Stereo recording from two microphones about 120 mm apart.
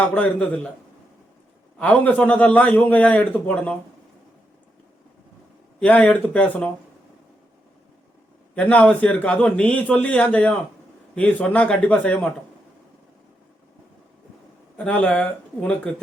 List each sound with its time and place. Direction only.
0.0 s a man's voice: 10° left (ahead or behind)
1.8 s a man's voice: 10° left (ahead or behind)
5.8 s a man's voice: 15° left (ahead or behind)
8.5 s a man's voice: 10° left (ahead or behind)
14.8 s a man's voice: 10° left (ahead or behind)